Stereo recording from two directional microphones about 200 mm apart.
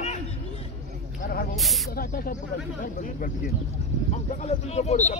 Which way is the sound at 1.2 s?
50° left (ahead or behind).